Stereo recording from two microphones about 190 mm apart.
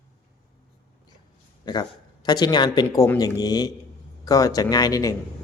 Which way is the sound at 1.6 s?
20° left (ahead or behind).